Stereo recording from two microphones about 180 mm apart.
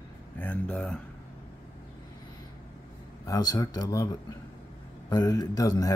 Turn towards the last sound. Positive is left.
turn(degrees=20)  # may be behind; listen again after turning